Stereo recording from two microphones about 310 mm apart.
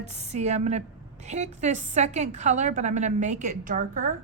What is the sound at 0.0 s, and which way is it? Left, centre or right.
A woman's voice, right.